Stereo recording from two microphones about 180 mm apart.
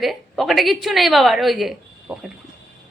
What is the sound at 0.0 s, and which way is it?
A woman's voice, centre (ahead or behind).